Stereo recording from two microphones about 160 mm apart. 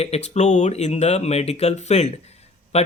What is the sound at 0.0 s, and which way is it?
Speech, 40° left (ahead or behind).